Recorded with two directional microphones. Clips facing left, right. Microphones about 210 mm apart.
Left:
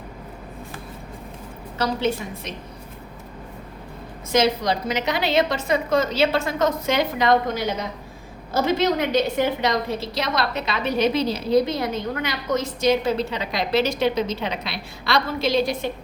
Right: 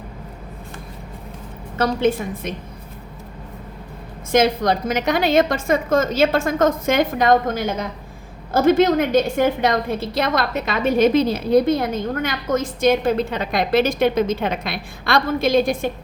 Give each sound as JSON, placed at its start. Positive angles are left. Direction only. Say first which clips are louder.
{"t": 1.8, "sound": "a woman's voice", "louder": "right 5 dB", "side_deg": -50}
{"t": 4.3, "sound": "a woman's voice", "louder": "right 3 dB", "side_deg": -50}